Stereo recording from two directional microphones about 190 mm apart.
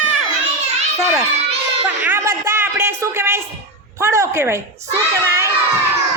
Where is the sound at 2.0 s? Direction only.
10° right (ahead or behind).